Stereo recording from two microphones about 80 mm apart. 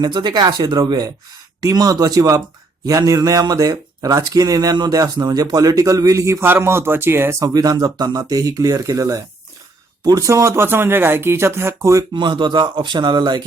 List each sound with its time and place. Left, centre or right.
0.0 s speech: right
0.9 s speech: right
6.4 s speech: right
7.3 s speech: right
12.1 s speech: right